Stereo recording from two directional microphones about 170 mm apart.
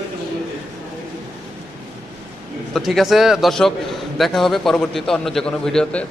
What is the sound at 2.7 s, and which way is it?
A man's voice, centre (ahead or behind).